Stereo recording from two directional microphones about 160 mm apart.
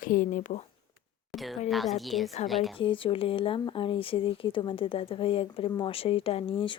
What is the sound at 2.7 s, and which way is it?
Speech, 35° left (ahead or behind).